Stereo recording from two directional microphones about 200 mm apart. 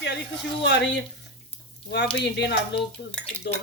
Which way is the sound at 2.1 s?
60° left (ahead or behind).